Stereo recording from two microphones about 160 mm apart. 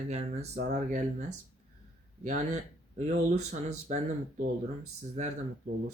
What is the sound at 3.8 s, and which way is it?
Speech, 50° right (ahead or behind).